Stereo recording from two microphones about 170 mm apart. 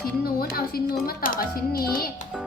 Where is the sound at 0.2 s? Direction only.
60° left (ahead or behind).